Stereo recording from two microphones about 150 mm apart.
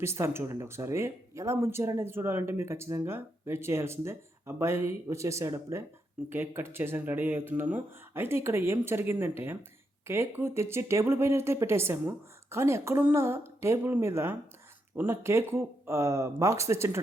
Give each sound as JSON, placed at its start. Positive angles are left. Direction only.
{"t": 0.0, "sound": "speech", "side_deg": -15}